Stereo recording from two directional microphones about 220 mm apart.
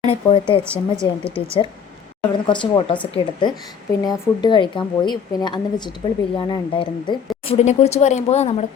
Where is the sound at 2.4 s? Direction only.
20° left (ahead or behind).